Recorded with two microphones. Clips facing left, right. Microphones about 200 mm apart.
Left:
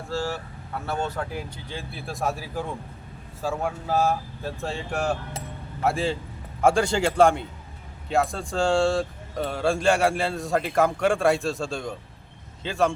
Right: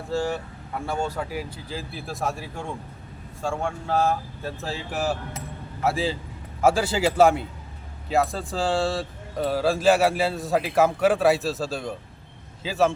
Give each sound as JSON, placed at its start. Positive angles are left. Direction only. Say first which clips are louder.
{"t": 0.1, "sound": "speech", "louder": "right 3 dB", "side_deg": -15}